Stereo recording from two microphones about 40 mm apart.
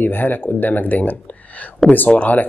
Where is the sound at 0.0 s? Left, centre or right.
Left.